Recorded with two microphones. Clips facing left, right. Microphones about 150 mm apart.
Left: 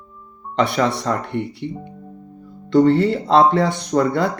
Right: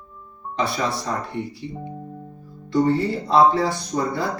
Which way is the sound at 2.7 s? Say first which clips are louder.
Left 5 dB; 70° left (ahead or behind).